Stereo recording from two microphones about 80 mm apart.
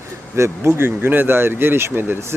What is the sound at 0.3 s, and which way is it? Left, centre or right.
Speech, right.